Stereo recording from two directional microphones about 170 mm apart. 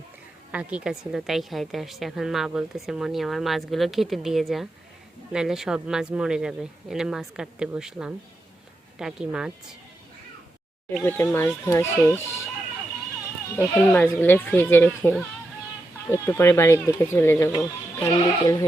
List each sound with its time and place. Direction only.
0.5 s a woman's voice: 5° right (ahead or behind)
10.8 s speech: 15° left (ahead or behind)
13.6 s speech: 10° left (ahead or behind)